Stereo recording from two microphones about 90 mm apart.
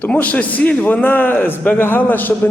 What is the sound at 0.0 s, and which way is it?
A man's voice, 15° left (ahead or behind).